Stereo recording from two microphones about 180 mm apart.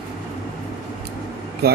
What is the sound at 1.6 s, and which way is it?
Speech, 60° right (ahead or behind).